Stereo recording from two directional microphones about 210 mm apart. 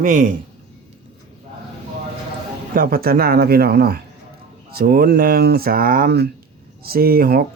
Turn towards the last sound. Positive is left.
turn(degrees=-45)  # may be behind; listen again after turning